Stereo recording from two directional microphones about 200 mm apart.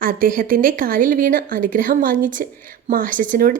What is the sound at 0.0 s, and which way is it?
A woman's voice, 45° right (ahead or behind).